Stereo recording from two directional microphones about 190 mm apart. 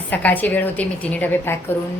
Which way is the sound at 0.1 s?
10° left (ahead or behind).